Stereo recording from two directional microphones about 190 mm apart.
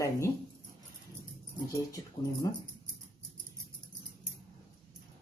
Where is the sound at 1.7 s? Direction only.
15° left (ahead or behind).